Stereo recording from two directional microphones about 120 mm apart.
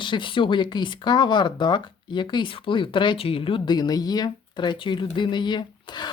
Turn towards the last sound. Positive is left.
turn(degrees=40)  # may be behind; listen again after turning